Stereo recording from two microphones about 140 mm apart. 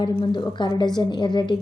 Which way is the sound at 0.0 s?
35° left (ahead or behind).